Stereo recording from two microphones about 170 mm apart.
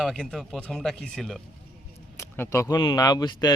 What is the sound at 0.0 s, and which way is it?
Speech, centre (ahead or behind).